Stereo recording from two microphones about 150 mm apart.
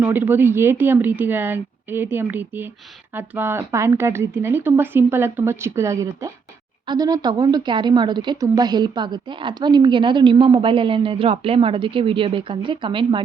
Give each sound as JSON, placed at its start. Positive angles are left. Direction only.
{"t": 0.0, "sound": "speech", "side_deg": -15}